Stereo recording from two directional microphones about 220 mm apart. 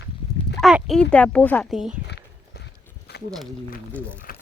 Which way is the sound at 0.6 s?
Centre (ahead or behind).